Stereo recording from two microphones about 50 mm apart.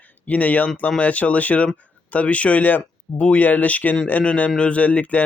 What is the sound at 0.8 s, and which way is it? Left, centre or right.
Speech, left.